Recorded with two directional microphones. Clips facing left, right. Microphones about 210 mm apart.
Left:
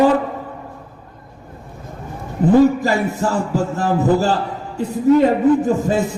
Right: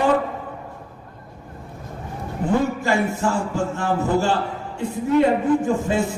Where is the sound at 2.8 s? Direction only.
35° left (ahead or behind).